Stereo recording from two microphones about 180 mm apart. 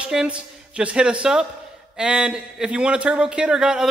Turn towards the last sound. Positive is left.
turn(degrees=-5)  # may be behind; listen again after turning